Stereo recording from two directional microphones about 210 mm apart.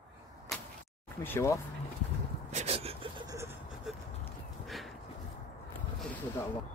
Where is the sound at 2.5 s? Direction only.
30° right (ahead or behind).